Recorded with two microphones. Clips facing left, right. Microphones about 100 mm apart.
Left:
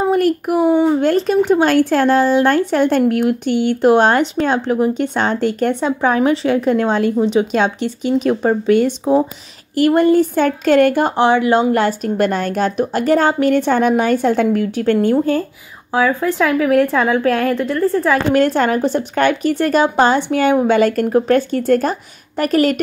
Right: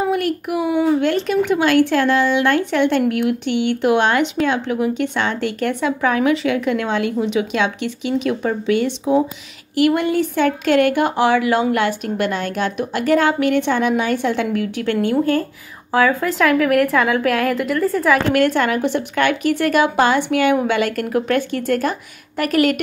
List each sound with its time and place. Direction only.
0.0 s a child's voice: 40° left (ahead or behind)
0.7 s speech: 30° left (ahead or behind)
15.9 s a woman's voice: 10° left (ahead or behind)
17.2 s a woman's voice: 90° right
17.7 s a woman's voice: 15° left (ahead or behind)
18.3 s speech: 35° left (ahead or behind)